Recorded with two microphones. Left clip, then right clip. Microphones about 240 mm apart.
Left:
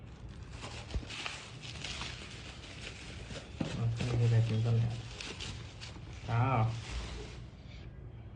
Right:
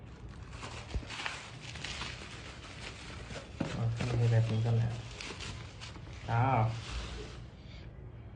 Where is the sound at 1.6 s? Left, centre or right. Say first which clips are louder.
Left 1 dB; centre.